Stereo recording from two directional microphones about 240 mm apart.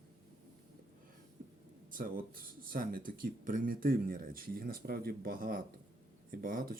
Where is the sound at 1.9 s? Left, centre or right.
Right.